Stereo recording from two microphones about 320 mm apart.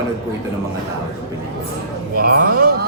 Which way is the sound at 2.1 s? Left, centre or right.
Right.